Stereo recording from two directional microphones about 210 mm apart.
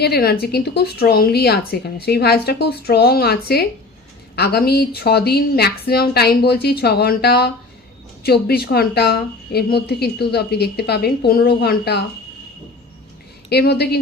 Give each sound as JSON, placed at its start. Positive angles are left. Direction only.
{"t": 0.0, "sound": "a woman's voice", "side_deg": 50}
{"t": 13.5, "sound": "a woman's voice", "side_deg": 50}